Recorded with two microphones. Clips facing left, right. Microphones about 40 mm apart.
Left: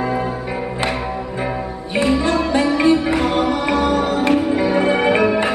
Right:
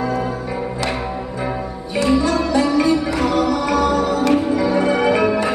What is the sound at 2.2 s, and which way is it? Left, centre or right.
Music, left.